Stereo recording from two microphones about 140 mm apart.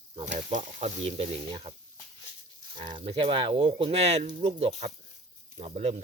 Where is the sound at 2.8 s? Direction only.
35° right (ahead or behind).